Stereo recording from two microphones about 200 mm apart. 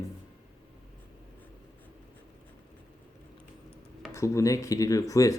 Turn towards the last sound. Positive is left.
turn(degrees=15)  # may be behind; listen again after turning